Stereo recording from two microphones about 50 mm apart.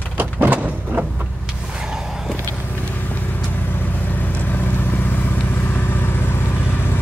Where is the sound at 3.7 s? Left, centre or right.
Left.